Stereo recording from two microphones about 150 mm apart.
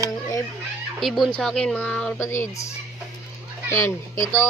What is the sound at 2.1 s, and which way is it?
Speech, 15° left (ahead or behind).